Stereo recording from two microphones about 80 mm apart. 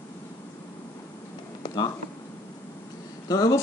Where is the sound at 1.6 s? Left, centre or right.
Left.